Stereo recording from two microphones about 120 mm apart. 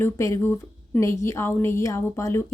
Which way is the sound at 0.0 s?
20° left (ahead or behind).